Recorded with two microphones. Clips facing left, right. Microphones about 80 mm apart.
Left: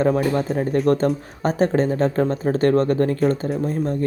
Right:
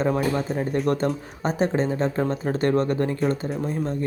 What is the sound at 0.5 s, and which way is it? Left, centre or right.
Speech, centre.